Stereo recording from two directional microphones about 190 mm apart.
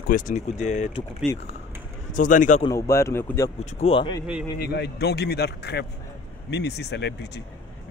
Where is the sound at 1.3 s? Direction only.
15° left (ahead or behind).